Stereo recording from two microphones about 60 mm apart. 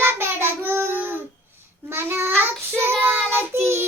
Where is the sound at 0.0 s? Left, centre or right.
Right.